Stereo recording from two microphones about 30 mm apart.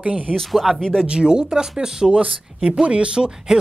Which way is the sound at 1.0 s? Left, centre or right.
Right.